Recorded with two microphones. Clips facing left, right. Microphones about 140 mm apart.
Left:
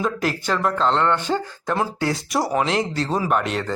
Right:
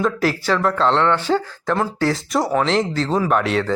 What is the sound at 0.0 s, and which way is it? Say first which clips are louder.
Speech: right 4 dB; centre (ahead or behind).